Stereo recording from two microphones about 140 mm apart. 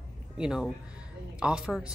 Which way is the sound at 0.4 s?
5° right (ahead or behind).